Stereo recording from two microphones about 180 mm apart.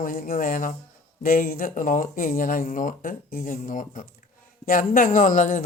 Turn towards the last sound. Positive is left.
turn(degrees=45)  # may be behind; listen again after turning